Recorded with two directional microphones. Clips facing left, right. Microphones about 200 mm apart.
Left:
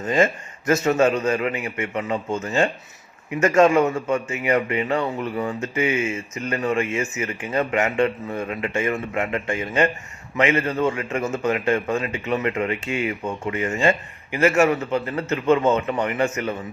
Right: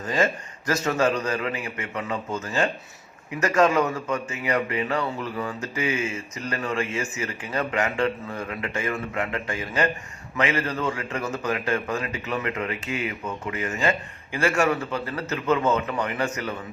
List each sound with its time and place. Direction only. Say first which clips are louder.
0.0 s a man's voice: left 4 dB; 25° left (ahead or behind)